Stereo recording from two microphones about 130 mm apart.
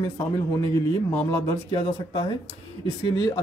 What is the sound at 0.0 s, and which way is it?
A man's voice, 25° left (ahead or behind).